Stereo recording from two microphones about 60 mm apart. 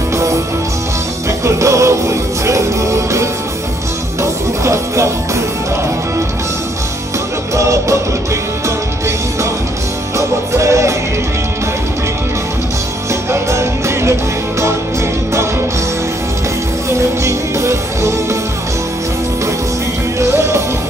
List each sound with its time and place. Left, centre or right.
1.4 s music: right
7.5 s music: right
10.1 s music: right
13.1 s music: right
16.9 s music: right